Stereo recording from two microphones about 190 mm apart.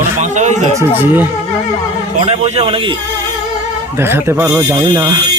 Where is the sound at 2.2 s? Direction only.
35° right (ahead or behind).